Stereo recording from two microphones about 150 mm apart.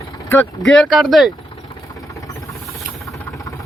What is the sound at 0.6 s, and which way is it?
Speech, centre (ahead or behind).